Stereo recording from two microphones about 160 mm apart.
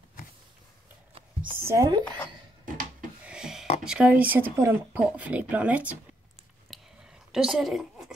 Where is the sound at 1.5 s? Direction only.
15° right (ahead or behind).